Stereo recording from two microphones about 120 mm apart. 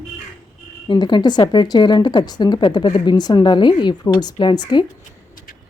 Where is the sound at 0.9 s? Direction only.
40° left (ahead or behind).